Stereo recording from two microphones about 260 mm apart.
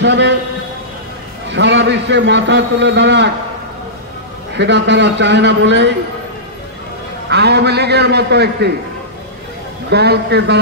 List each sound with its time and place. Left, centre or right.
0.0 s a man's voice: right
1.5 s a man's voice: right
4.6 s a man's voice: right
7.2 s a man's voice: right
9.8 s a man's voice: right